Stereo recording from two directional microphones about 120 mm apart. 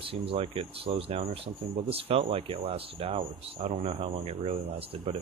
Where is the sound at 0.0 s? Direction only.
50° right (ahead or behind).